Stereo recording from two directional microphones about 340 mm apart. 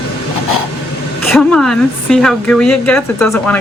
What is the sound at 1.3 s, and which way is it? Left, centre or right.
A woman's voice, centre.